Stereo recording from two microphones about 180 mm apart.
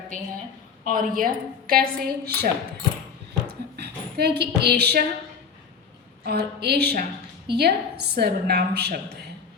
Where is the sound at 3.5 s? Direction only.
65° right (ahead or behind).